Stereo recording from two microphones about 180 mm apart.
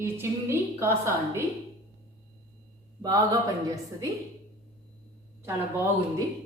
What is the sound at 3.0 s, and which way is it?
Speech, 20° right (ahead or behind).